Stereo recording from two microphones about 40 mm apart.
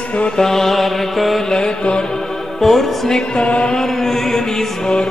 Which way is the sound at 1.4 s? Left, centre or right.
Centre.